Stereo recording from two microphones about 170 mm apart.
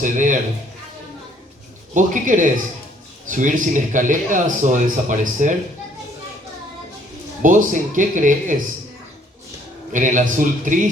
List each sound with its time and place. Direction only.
0.0 s a man's voice: 50° right (ahead or behind)
1.9 s a man's voice: 50° right (ahead or behind)
7.4 s a man's voice: 50° right (ahead or behind)
9.9 s a man's voice: 50° right (ahead or behind)